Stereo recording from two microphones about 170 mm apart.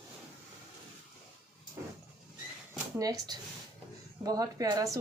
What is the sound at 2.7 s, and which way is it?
Speech, 20° right (ahead or behind).